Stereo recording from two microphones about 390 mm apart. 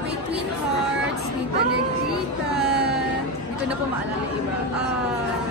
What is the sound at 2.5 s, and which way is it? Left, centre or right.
Music, right.